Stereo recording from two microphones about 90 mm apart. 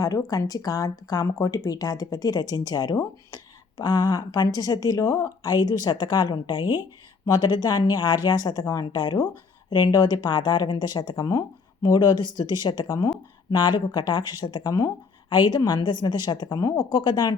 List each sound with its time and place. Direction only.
0.0 s speech: 40° left (ahead or behind)
5.4 s speech: 50° left (ahead or behind)
14.7 s speech: 45° left (ahead or behind)